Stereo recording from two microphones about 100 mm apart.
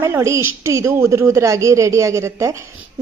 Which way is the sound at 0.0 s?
30° right (ahead or behind).